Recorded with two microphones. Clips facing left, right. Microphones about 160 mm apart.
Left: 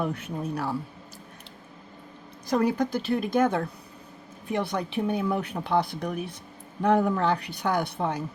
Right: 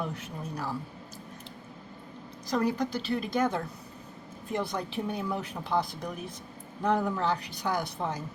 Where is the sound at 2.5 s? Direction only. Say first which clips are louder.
Left 4 dB; 55° left (ahead or behind).